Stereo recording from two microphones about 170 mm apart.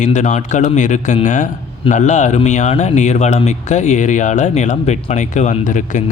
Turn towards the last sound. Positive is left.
turn(degrees=45)  # may be behind; listen again after turning